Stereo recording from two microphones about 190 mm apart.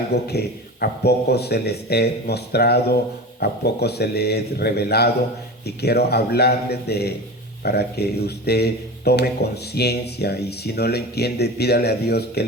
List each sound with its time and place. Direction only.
0.1 s speech: 60° left (ahead or behind)